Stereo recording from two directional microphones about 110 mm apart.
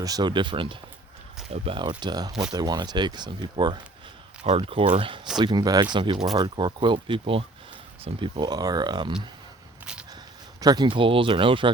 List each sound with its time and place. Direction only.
0.0 s speech: 35° right (ahead or behind)
1.5 s speech: 60° right (ahead or behind)
1.8 s speech: 45° right (ahead or behind)
4.4 s speech: 55° right (ahead or behind)
5.4 s speech: 40° right (ahead or behind)
8.4 s speech: 35° right (ahead or behind)
10.6 s speech: 40° right (ahead or behind)